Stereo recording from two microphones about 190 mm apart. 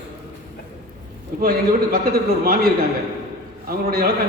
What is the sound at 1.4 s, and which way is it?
Speech, 50° right (ahead or behind).